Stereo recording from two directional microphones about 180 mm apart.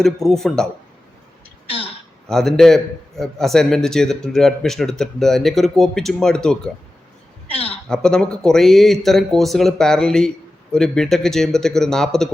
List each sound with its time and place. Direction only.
0.0 s speech: centre (ahead or behind)
2.3 s speech: centre (ahead or behind)
7.4 s a sound: 30° left (ahead or behind)
7.9 s speech: 5° left (ahead or behind)